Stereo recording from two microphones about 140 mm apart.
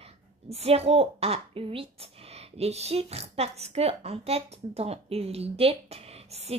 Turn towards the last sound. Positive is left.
turn(degrees=-45)  # may be behind; listen again after turning